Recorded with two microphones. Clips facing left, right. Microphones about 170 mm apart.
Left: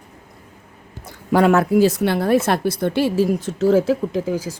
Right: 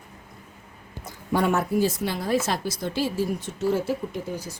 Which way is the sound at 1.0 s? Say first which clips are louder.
Left 8 dB; 90° left.